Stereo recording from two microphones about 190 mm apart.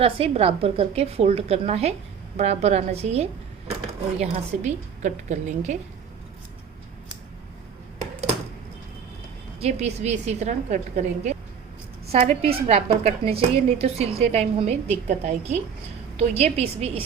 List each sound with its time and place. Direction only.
0.0 s a woman's voice: 30° right (ahead or behind)
9.6 s a woman's voice: 35° right (ahead or behind)